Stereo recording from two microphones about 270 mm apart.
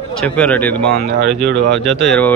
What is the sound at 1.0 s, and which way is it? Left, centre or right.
Speech, right.